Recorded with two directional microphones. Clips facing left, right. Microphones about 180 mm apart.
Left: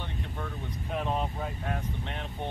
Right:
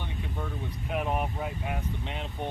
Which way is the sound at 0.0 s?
10° right (ahead or behind).